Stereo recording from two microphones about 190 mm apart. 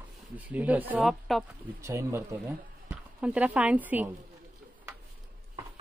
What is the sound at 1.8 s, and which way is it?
Speech, 15° right (ahead or behind).